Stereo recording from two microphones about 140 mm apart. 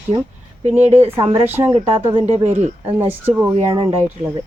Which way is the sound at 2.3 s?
50° right (ahead or behind).